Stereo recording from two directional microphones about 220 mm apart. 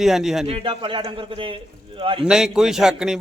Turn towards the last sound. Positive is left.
turn(degrees=-5)  # may be behind; listen again after turning